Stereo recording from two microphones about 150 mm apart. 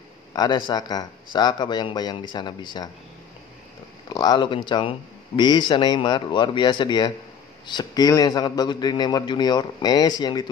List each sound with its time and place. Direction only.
0.3 s a man's voice: 25° left (ahead or behind)
4.1 s a man's voice: 25° left (ahead or behind)